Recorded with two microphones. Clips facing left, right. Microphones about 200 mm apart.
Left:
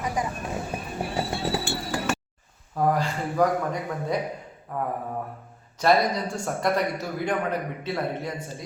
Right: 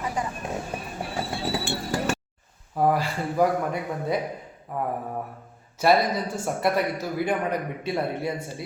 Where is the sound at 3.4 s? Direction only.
10° right (ahead or behind).